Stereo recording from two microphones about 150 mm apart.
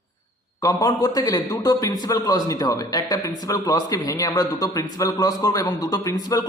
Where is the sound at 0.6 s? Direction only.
25° left (ahead or behind).